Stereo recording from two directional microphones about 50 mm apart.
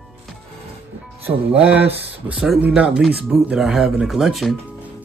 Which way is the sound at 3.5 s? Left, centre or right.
Centre.